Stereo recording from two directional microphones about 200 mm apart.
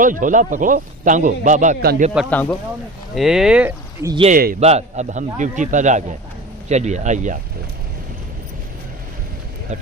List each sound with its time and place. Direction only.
0.0 s a man's voice: 40° right (ahead or behind)
2.3 s speech: 10° left (ahead or behind)
3.2 s speech: 5° right (ahead or behind)
4.3 s a man's voice: 45° right (ahead or behind)
4.6 s a man's voice: 35° right (ahead or behind)